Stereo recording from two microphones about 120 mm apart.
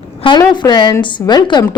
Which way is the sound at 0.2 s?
45° left (ahead or behind).